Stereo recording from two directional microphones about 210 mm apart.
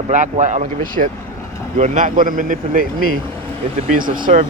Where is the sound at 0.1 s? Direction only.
35° right (ahead or behind).